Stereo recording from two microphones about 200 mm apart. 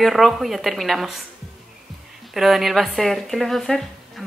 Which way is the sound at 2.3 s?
Centre (ahead or behind).